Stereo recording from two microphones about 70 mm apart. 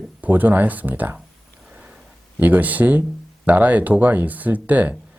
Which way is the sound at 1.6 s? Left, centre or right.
Centre.